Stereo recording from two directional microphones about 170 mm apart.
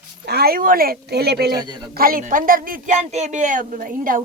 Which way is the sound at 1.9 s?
60° right (ahead or behind).